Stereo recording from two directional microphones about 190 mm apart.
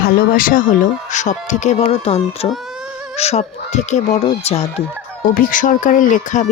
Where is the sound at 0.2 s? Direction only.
50° left (ahead or behind).